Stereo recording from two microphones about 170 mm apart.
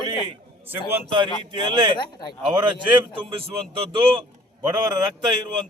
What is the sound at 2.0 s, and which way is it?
Speech, 25° left (ahead or behind).